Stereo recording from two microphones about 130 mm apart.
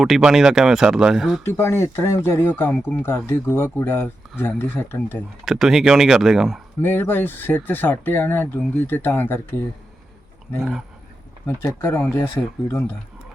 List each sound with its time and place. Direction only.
0.0 s speech: centre (ahead or behind)
1.5 s speech: 20° left (ahead or behind)
5.5 s speech: 5° right (ahead or behind)
6.8 s speech: 15° left (ahead or behind)
10.6 s speech: 5° right (ahead or behind)
11.4 s speech: 20° left (ahead or behind)